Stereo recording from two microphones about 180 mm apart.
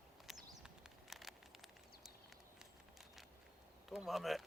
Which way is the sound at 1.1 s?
Centre (ahead or behind).